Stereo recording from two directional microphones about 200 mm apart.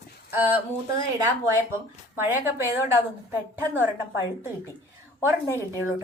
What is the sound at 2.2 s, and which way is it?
Speech, 10° right (ahead or behind).